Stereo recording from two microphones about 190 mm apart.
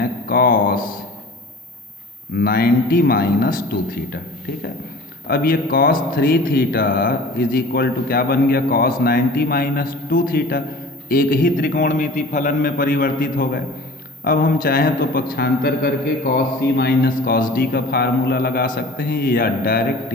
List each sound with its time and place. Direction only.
0.0 s a sound: 50° left (ahead or behind)
2.3 s a man's voice: 50° left (ahead or behind)
5.3 s a man's voice: 50° left (ahead or behind)